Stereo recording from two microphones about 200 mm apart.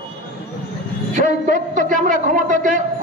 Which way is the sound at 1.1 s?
40° right (ahead or behind).